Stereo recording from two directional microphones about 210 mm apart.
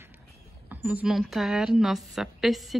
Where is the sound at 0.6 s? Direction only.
10° right (ahead or behind).